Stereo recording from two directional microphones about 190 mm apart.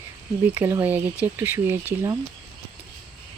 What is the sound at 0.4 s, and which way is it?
Speech, 10° right (ahead or behind).